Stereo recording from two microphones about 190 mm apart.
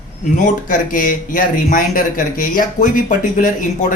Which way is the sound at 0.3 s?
40° left (ahead or behind).